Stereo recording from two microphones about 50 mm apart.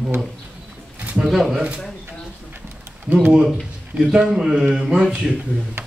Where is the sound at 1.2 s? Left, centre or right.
Centre.